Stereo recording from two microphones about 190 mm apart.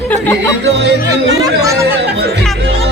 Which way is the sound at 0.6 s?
65° right (ahead or behind).